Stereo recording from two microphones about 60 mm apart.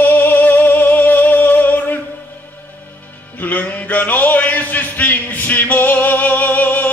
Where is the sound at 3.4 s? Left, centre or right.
Left.